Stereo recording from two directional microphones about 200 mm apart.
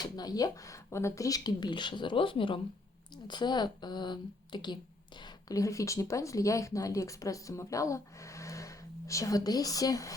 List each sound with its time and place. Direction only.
0.0 s speech: 20° left (ahead or behind)